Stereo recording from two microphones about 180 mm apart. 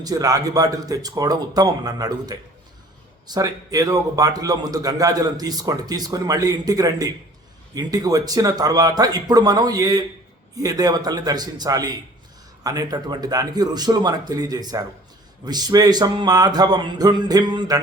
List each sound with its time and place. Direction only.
0.0 s a man's voice: 20° right (ahead or behind)